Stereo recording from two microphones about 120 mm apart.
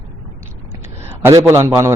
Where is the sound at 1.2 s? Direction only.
20° right (ahead or behind).